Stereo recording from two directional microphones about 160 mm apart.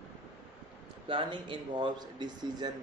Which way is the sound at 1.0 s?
30° right (ahead or behind).